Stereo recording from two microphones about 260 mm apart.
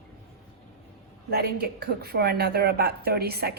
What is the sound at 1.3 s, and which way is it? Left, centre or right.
A woman's voice, right.